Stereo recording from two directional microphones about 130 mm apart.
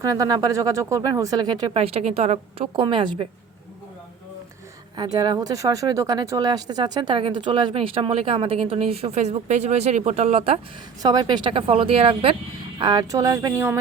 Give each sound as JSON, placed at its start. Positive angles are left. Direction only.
{"t": 0.0, "sound": "speech", "side_deg": -30}
{"t": 1.7, "sound": "speech", "side_deg": -50}
{"t": 2.7, "sound": "a woman's voice", "side_deg": -40}
{"t": 4.9, "sound": "speech", "side_deg": -30}
{"t": 11.0, "sound": "speech", "side_deg": -30}
{"t": 12.8, "sound": "speech", "side_deg": -30}